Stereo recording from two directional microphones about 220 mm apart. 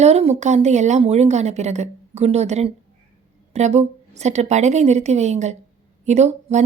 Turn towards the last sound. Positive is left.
turn(degrees=-30)  # may be behind; listen again after turning